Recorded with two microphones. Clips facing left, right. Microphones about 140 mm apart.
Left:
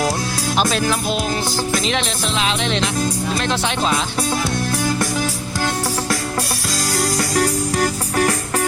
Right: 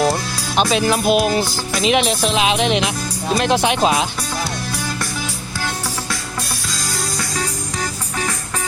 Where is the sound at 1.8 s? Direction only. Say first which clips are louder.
Right 5 dB; 10° right (ahead or behind).